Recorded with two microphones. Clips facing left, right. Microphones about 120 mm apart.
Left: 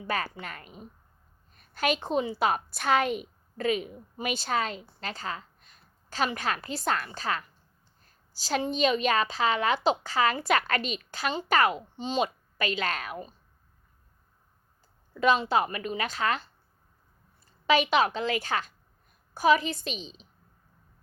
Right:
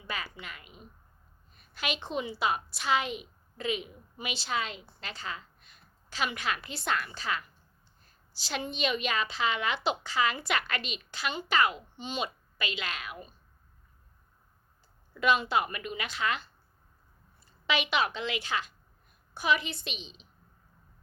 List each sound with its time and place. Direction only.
0.0 s a woman's voice: 45° left (ahead or behind)
8.0 s a sound: 40° left (ahead or behind)
8.6 s a child's voice: 35° left (ahead or behind)
15.1 s a child's voice: 35° left (ahead or behind)
17.7 s a child's voice: 40° left (ahead or behind)